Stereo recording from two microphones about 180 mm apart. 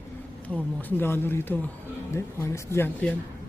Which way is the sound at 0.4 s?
10° left (ahead or behind).